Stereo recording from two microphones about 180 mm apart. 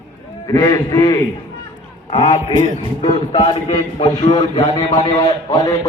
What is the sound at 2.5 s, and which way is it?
Speech, 45° right (ahead or behind).